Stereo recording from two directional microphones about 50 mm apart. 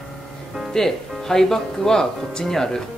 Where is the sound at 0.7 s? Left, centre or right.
Centre.